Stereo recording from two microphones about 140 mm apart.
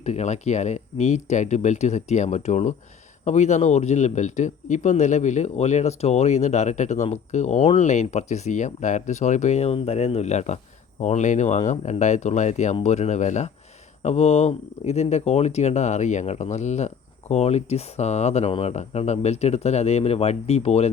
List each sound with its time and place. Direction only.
0.0 s speech: 55° left (ahead or behind)